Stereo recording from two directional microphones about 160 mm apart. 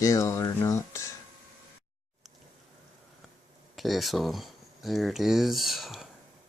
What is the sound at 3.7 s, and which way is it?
Speech, centre (ahead or behind).